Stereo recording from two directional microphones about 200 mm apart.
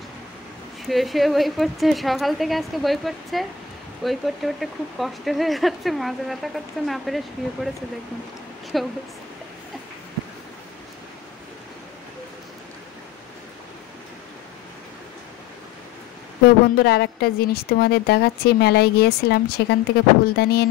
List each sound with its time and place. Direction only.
0.8 s speech: centre (ahead or behind)
8.7 s speech: centre (ahead or behind)
16.7 s a woman's voice: 55° left (ahead or behind)
20.3 s a sound: 55° left (ahead or behind)